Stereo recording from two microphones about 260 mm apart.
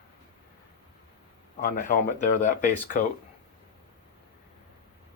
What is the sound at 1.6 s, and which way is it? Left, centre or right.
Speech, left.